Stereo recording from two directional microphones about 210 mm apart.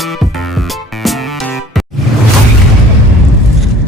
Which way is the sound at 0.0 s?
Centre (ahead or behind).